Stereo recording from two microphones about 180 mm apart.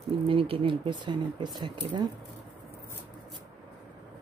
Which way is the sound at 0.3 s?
30° right (ahead or behind).